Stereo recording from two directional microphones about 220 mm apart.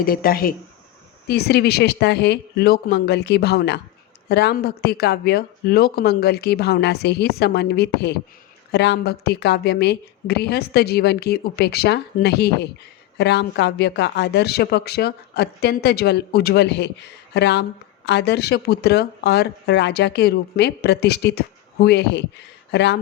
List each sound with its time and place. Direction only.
0.0 s speech: 40° left (ahead or behind)